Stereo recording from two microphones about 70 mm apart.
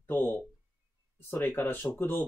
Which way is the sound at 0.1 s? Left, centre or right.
Left.